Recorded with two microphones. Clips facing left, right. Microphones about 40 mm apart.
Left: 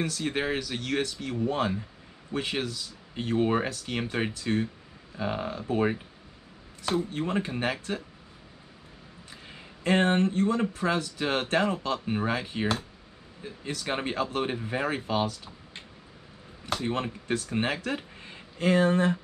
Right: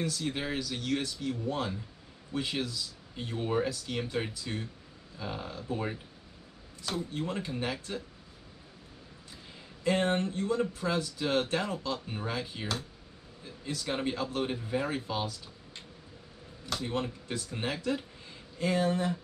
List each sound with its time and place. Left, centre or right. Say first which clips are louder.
0.2 s speech: left 5 dB; left
7.1 s speech: left 5 dB; left
9.3 s speech: left 4 dB; left
16.6 s speech: left 4 dB; left